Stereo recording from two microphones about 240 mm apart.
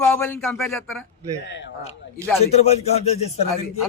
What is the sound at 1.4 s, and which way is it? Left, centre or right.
Speech, left.